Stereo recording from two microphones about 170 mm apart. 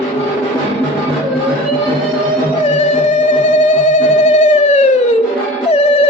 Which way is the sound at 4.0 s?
45° left (ahead or behind).